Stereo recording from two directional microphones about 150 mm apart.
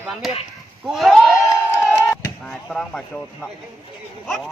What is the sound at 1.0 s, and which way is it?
Speech, centre (ahead or behind).